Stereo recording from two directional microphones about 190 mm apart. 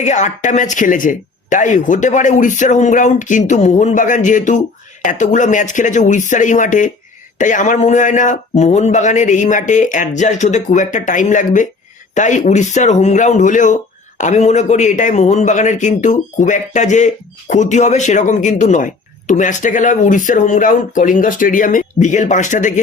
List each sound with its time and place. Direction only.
0.0 s speech: 40° left (ahead or behind)